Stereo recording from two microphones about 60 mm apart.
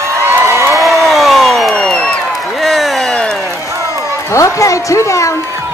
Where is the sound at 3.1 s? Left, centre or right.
Centre.